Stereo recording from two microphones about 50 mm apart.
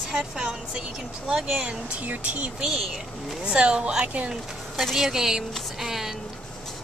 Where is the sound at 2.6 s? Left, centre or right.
Centre.